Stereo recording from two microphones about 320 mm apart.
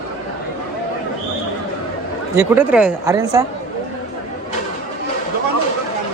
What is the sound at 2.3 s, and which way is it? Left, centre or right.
Speech, centre.